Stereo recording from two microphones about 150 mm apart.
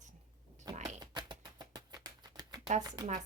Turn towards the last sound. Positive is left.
turn(degrees=-25)  # may be behind; listen again after turning